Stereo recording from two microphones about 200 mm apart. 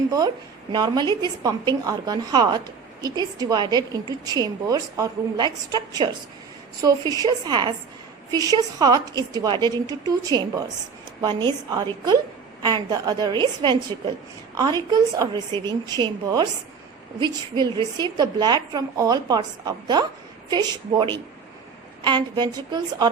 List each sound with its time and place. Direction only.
0.7 s a woman's voice: 20° right (ahead or behind)